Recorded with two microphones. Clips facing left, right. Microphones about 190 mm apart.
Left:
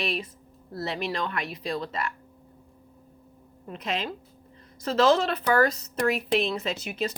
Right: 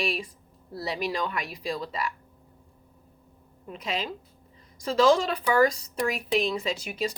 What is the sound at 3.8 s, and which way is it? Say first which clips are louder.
A woman's voice: left 1 dB; 10° right (ahead or behind).